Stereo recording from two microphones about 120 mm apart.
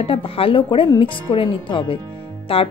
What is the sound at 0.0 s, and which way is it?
Speech, 50° left (ahead or behind).